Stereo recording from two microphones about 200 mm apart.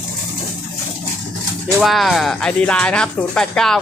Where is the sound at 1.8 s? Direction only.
Centre (ahead or behind).